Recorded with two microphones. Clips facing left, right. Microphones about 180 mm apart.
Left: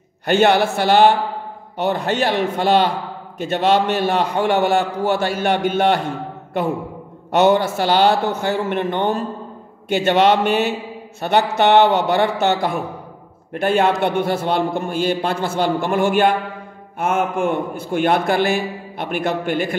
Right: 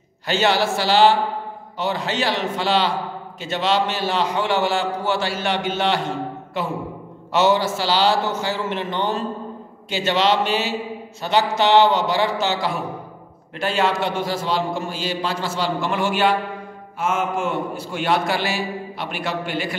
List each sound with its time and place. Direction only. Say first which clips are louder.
0.3 s a man's voice: left 5 dB; 55° left (ahead or behind)